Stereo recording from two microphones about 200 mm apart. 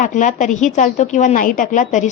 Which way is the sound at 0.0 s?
40° left (ahead or behind).